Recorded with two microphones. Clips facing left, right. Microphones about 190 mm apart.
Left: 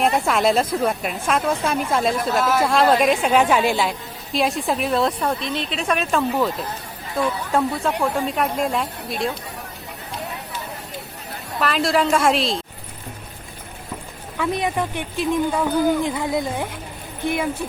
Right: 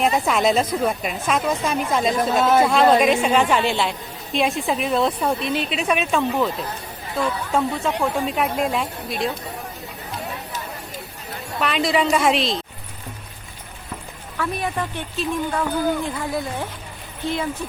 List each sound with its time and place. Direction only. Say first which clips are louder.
0.0 s a woman's voice: even; centre (ahead or behind)
2.4 s speech: right 4 dB; 25° right (ahead or behind)
2.6 s a woman's voice: right 1 dB; centre (ahead or behind)
7.5 s a woman's voice: left 1 dB; 5° left (ahead or behind)
11.6 s a woman's voice: left 1 dB; centre (ahead or behind)
14.3 s speech: left 3 dB; 15° left (ahead or behind)